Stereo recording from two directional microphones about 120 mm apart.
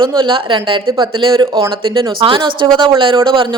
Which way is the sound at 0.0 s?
45° right (ahead or behind).